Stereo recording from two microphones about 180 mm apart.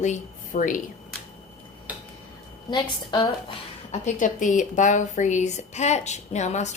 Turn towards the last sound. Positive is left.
turn(degrees=40)  # may be behind; listen again after turning